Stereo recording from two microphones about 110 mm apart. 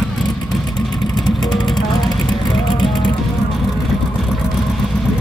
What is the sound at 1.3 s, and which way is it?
Music, 40° left (ahead or behind).